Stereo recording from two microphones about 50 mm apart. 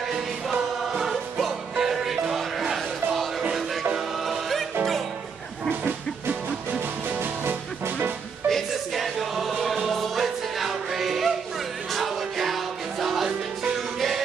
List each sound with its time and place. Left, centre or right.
0.1 s music: centre
4.3 s music: centre
5.7 s a sound: right
7.2 s music: right
8.5 s music: centre